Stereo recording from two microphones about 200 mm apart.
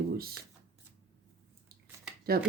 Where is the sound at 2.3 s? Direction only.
50° right (ahead or behind).